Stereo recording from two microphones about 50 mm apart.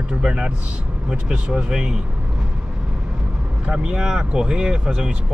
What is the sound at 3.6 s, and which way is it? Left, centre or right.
Speech, centre.